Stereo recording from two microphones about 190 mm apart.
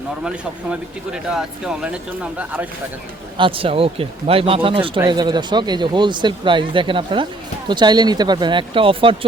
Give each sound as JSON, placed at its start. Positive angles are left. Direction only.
{"t": 0.3, "sound": "speech", "side_deg": -5}
{"t": 3.3, "sound": "speech", "side_deg": -25}